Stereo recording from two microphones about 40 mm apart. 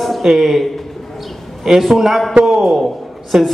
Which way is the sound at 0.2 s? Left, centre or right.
Centre.